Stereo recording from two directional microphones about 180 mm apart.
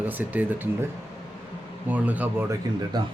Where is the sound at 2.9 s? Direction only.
20° right (ahead or behind).